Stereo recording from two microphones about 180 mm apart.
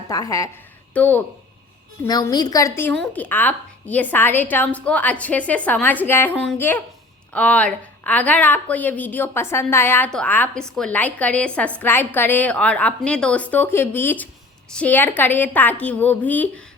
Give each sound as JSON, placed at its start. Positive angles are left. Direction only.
{"t": 0.1, "sound": "a woman's voice", "side_deg": 20}
{"t": 2.0, "sound": "a woman's voice", "side_deg": 20}